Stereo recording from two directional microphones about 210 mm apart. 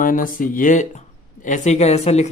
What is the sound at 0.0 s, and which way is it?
Speech, 40° left (ahead or behind).